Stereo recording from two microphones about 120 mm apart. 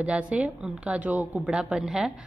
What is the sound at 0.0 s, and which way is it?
A woman's voice, 10° right (ahead or behind).